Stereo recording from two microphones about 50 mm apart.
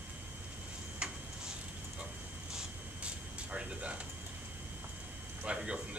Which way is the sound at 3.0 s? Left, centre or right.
Centre.